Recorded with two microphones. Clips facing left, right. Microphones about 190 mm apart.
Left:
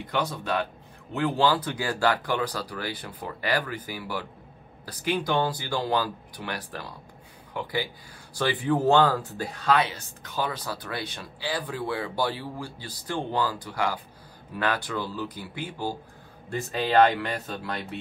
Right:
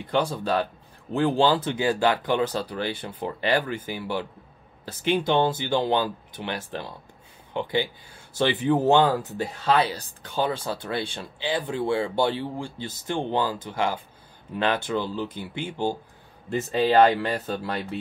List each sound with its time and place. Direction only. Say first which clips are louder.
0.0 s speech: right 4 dB; 30° right (ahead or behind)